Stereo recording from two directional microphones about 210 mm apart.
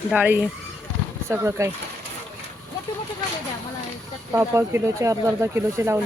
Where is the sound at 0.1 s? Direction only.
5° right (ahead or behind).